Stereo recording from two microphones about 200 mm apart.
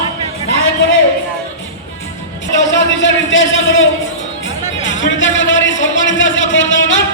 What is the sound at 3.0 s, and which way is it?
Speech, 70° left (ahead or behind).